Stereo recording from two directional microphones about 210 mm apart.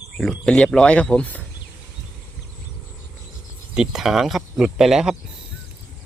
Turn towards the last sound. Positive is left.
turn(degrees=0)  # may be behind; listen again after turning